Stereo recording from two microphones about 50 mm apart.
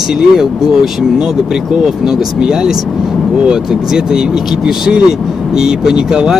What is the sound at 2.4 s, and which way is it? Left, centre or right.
Speech, centre.